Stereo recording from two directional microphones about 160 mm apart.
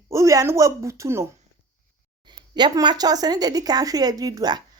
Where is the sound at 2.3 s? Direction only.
25° right (ahead or behind).